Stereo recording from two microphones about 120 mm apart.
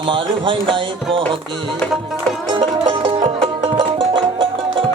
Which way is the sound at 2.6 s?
45° right (ahead or behind).